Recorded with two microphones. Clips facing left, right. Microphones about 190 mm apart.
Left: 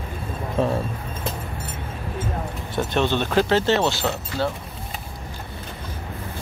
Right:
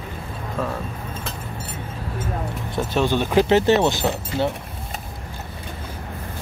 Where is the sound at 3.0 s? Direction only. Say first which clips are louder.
Right 4 dB; 10° right (ahead or behind).